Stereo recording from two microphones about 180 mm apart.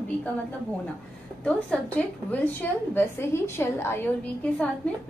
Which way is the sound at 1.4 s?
5° left (ahead or behind).